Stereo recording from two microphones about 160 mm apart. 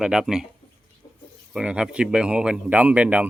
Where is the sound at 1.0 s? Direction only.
30° left (ahead or behind).